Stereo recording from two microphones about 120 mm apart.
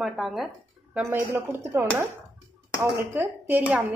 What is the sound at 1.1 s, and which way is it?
Speech, 20° right (ahead or behind).